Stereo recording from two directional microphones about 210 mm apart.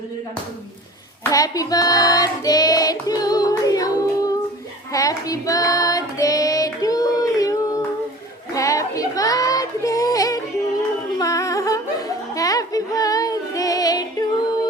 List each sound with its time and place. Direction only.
1.2 s child singing: 15° left (ahead or behind)
8.5 s female singing: 15° left (ahead or behind)
11.2 s music: 15° left (ahead or behind)